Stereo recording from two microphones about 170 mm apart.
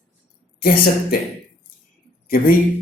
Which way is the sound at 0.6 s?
60° left (ahead or behind).